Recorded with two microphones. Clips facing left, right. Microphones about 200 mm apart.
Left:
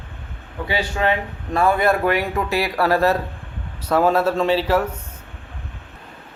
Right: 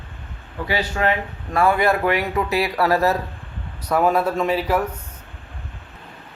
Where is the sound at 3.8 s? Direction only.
30° left (ahead or behind).